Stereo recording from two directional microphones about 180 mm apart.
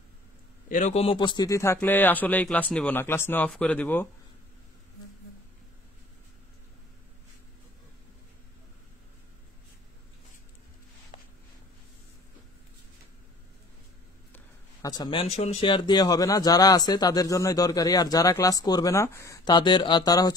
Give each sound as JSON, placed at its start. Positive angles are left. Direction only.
{"t": 0.7, "sound": "speech", "side_deg": 45}
{"t": 1.0, "sound": "speech", "side_deg": 25}
{"t": 14.3, "sound": "a sound", "side_deg": 20}
{"t": 15.3, "sound": "speech", "side_deg": 35}